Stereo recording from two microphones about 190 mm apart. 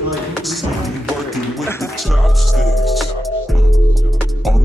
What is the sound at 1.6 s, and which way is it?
Music, 15° left (ahead or behind).